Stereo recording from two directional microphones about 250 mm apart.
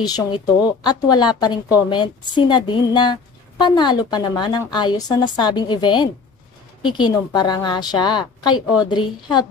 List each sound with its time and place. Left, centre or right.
0.0 s a woman's voice: centre